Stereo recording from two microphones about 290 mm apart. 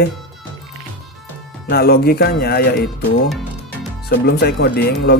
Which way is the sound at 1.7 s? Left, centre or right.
Left.